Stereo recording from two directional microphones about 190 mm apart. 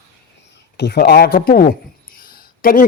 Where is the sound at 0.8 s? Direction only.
60° left (ahead or behind).